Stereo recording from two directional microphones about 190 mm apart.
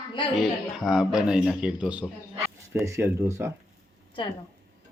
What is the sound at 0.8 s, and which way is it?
Speech, 5° right (ahead or behind).